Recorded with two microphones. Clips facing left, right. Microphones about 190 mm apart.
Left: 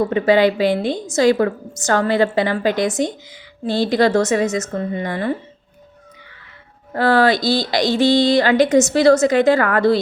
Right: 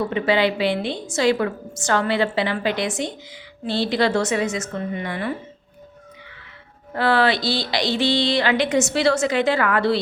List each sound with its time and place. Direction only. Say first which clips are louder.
0.0 s speech: left 5 dB; 45° left (ahead or behind)
6.9 s speech: left 4 dB; 45° left (ahead or behind)